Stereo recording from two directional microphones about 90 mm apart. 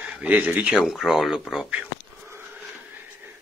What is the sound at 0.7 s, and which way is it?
Speech, 5° right (ahead or behind).